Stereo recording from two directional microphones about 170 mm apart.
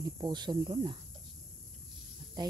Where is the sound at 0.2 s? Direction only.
25° right (ahead or behind).